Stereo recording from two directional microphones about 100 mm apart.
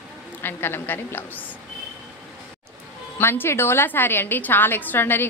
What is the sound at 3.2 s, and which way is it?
A woman's voice, 25° left (ahead or behind).